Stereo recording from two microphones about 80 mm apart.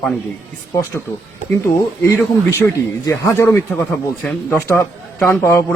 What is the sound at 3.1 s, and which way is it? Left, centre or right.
Speech, left.